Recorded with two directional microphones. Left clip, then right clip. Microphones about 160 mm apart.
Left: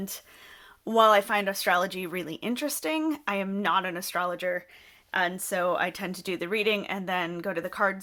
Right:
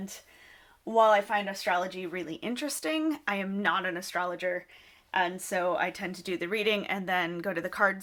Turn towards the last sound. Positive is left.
turn(degrees=15)  # may be behind; listen again after turning